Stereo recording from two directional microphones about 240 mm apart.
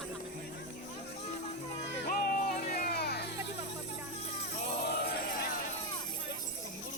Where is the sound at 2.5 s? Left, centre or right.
Left.